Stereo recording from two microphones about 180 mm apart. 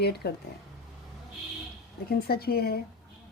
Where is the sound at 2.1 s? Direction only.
60° left (ahead or behind).